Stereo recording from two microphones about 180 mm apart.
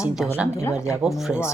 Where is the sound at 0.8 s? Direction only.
5° right (ahead or behind).